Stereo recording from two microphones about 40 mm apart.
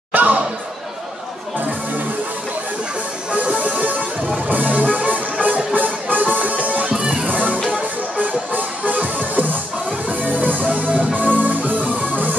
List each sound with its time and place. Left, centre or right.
0.1 s a sound: right
3.3 s music: right
6.9 s music: right
7.2 s music: right